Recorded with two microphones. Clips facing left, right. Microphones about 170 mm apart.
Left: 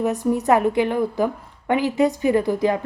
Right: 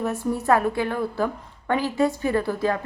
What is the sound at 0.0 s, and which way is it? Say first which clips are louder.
A woman's voice: left 4 dB; 15° left (ahead or behind).